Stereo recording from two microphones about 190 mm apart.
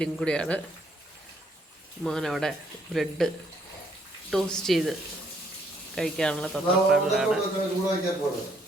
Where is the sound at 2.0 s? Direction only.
Centre (ahead or behind).